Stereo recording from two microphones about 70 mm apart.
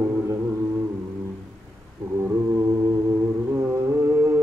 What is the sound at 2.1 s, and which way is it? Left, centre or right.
Humming, right.